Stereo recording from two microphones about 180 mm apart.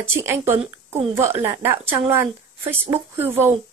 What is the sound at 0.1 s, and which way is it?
A woman's voice, 15° right (ahead or behind).